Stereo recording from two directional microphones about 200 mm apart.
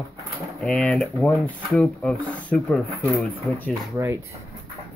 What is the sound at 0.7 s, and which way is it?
Speech, 5° left (ahead or behind).